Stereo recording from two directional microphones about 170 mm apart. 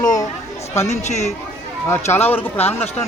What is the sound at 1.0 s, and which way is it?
Speech, 40° left (ahead or behind).